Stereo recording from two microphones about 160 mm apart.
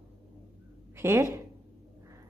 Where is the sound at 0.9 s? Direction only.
15° right (ahead or behind).